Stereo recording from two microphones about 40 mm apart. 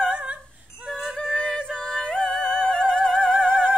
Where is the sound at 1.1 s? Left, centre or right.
Centre.